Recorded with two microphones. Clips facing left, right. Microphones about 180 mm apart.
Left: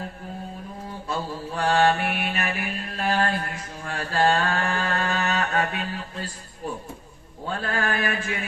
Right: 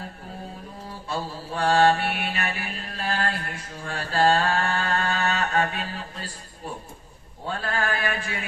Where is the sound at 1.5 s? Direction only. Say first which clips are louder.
Right 1 dB; 35° right (ahead or behind).